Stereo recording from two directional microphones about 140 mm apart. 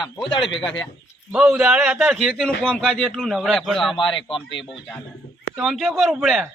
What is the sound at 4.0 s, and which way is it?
Speech, 40° left (ahead or behind).